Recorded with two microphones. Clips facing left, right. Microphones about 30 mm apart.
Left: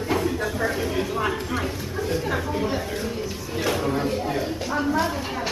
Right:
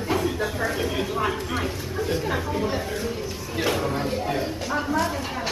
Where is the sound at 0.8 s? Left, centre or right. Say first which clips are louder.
Even; centre.